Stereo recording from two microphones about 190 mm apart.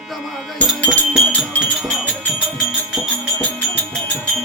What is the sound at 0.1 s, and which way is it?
Music, centre (ahead or behind).